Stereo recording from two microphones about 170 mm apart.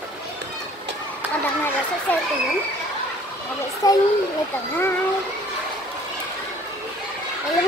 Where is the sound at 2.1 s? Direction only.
10° left (ahead or behind).